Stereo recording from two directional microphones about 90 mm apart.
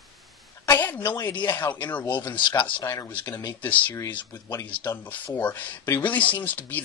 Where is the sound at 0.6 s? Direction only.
25° left (ahead or behind).